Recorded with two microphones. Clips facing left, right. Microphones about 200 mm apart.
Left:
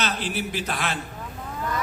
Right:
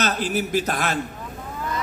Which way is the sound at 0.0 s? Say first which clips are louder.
Right 4 dB; 45° right (ahead or behind).